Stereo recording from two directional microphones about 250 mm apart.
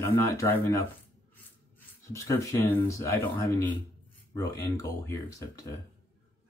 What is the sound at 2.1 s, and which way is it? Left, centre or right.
Speech, centre.